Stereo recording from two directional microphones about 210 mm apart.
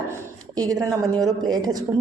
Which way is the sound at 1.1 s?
20° right (ahead or behind).